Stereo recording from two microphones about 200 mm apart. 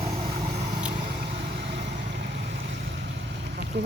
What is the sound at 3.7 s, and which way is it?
Speech, 50° right (ahead or behind).